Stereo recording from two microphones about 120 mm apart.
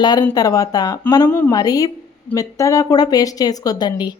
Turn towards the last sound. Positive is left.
turn(degrees=35)  # may be behind; listen again after turning